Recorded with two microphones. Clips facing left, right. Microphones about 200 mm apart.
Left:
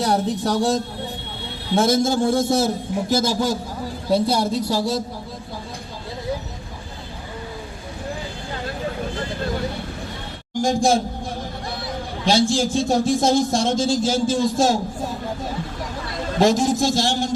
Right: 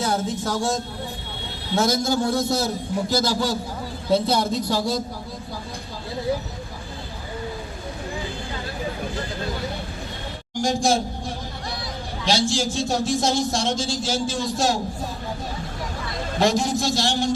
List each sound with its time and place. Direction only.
0.4 s a man's voice: 35° left (ahead or behind)
3.2 s a man's voice: 45° left (ahead or behind)
4.1 s speech: 10° left (ahead or behind)
10.7 s a man's voice: 55° left (ahead or behind)
12.2 s a man's voice: 55° left (ahead or behind)
16.4 s a man's voice: 50° left (ahead or behind)